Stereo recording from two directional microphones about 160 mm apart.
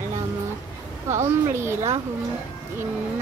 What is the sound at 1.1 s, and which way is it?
Speech, 15° right (ahead or behind).